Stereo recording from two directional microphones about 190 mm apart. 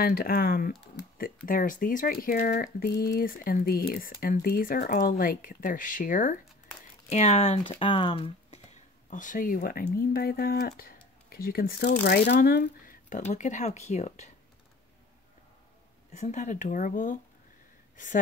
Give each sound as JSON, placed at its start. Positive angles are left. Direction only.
{"t": 0.0, "sound": "speech", "side_deg": 50}
{"t": 8.7, "sound": "speech", "side_deg": 45}
{"t": 13.3, "sound": "speech", "side_deg": 40}
{"t": 16.1, "sound": "speech", "side_deg": 35}